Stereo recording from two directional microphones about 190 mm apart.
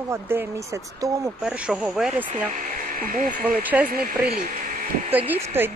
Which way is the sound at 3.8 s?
5° right (ahead or behind).